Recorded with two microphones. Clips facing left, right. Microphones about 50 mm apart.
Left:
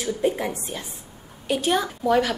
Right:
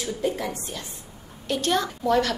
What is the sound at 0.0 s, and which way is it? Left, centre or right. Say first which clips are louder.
A woman's voice: left 3 dB; left.